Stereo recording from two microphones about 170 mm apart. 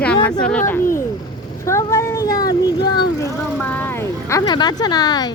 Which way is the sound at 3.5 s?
10° left (ahead or behind).